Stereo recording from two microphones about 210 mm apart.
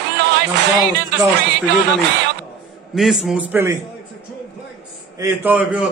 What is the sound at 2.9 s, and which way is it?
Speech, centre (ahead or behind).